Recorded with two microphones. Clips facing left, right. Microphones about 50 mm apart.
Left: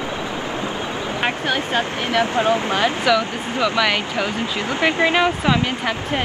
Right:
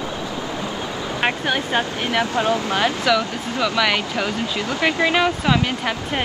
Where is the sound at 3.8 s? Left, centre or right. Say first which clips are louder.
Even; centre.